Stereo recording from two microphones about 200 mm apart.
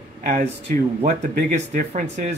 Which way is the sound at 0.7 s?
45° right (ahead or behind).